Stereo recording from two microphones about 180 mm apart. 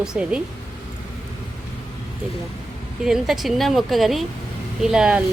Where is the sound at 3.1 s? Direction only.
Centre (ahead or behind).